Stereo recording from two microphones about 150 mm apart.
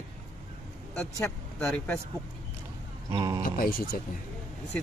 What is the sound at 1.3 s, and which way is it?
Speech, 10° left (ahead or behind).